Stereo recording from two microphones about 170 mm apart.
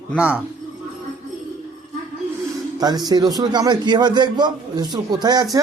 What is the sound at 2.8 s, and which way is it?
A man's voice, 25° right (ahead or behind).